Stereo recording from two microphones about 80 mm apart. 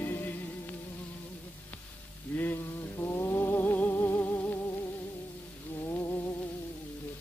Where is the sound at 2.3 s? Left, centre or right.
Centre.